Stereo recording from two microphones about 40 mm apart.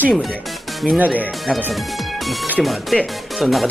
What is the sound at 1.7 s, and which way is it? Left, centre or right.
Speech, centre.